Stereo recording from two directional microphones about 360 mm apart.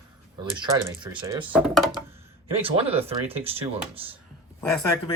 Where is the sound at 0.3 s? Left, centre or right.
Centre.